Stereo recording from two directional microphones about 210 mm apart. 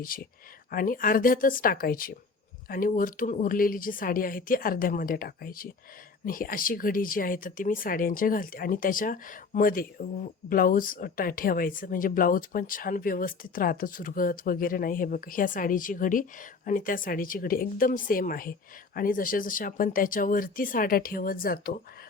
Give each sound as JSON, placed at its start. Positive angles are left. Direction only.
{"t": 0.0, "sound": "speech", "side_deg": 45}